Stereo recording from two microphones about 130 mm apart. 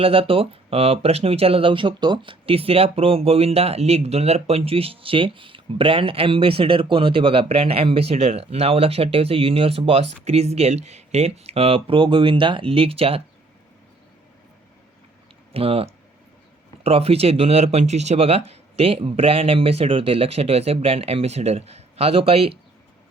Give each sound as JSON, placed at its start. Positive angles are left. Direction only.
{"t": 0.0, "sound": "speech", "side_deg": -45}
{"t": 15.5, "sound": "speech", "side_deg": -45}